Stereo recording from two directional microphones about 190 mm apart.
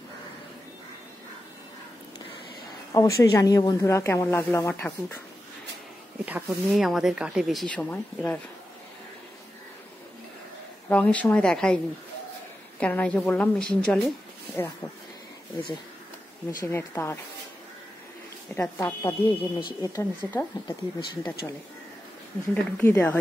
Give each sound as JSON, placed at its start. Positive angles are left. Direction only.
{"t": 2.9, "sound": "speech", "side_deg": 15}
{"t": 6.2, "sound": "speech", "side_deg": -5}
{"t": 10.9, "sound": "speech", "side_deg": 5}
{"t": 16.6, "sound": "speech", "side_deg": 10}
{"t": 18.6, "sound": "speech", "side_deg": 10}
{"t": 19.0, "sound": "speech", "side_deg": 25}
{"t": 22.5, "sound": "speech", "side_deg": 10}